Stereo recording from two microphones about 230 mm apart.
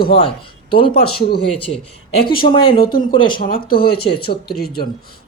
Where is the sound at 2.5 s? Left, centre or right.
Left.